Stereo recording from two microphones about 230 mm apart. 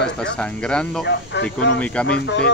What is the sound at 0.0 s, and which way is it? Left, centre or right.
Speech, centre.